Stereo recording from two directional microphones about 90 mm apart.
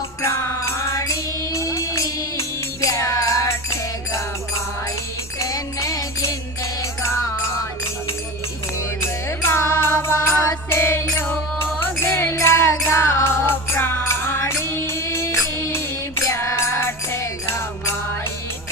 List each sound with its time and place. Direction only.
0.2 s music: 30° left (ahead or behind)
5.4 s music: 40° left (ahead or behind)
9.0 s music: 30° left (ahead or behind)